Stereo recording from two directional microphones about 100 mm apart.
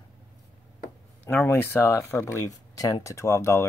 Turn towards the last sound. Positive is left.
turn(degrees=25)  # may be behind; listen again after turning